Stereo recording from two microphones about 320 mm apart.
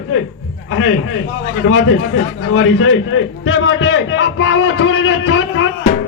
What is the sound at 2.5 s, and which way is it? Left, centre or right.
A man's voice, left.